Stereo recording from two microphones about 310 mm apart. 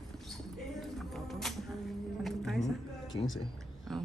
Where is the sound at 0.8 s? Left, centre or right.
Centre.